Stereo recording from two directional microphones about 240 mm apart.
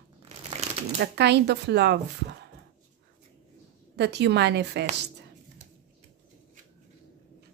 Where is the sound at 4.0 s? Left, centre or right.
Right.